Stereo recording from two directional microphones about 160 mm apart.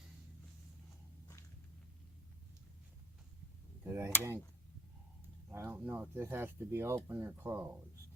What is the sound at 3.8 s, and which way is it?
Tick-tock, 15° right (ahead or behind).